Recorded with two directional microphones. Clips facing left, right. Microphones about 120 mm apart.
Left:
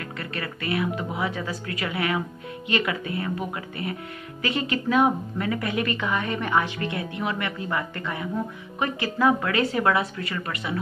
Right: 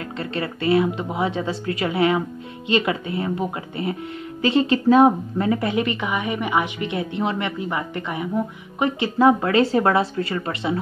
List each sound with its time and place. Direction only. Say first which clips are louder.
0.2 s a woman's voice: right 8 dB; 25° right (ahead or behind)